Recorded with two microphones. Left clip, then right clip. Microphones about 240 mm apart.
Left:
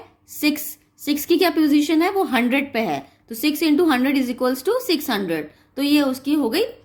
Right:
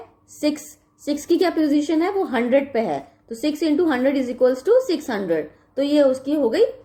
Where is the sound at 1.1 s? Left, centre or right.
Left.